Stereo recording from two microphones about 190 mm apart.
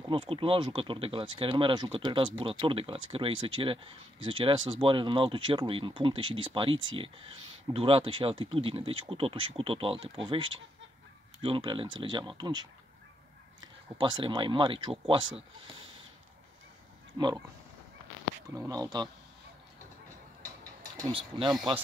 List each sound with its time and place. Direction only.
0.1 s speech: 30° right (ahead or behind)
13.9 s speech: 25° right (ahead or behind)
17.2 s speech: 15° right (ahead or behind)
18.5 s speech: 20° right (ahead or behind)
21.0 s speech: 25° right (ahead or behind)